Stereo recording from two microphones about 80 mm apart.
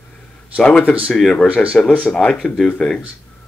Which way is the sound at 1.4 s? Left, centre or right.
Centre.